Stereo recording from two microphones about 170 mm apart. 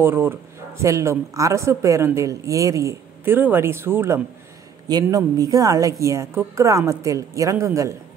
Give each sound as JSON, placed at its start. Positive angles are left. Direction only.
{"t": 0.0, "sound": "a woman's voice", "side_deg": -15}